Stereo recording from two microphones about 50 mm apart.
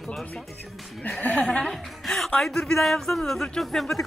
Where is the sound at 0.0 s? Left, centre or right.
Centre.